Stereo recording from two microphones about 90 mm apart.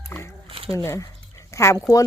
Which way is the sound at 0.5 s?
90° right.